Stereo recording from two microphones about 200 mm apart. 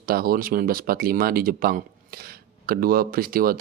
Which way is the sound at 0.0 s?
50° right (ahead or behind).